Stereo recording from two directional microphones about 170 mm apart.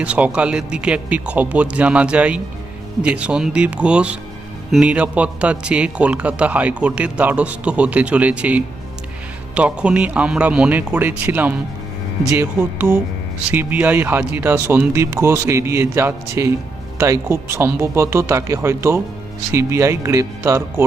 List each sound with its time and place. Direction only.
0.0 s a man's voice: 5° right (ahead or behind)